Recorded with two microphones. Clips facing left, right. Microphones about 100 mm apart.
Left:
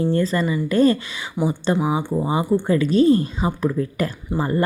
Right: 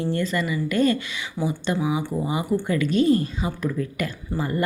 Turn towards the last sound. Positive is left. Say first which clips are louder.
# left 4 dB
turn(degrees=30)  # may be behind; listen again after turning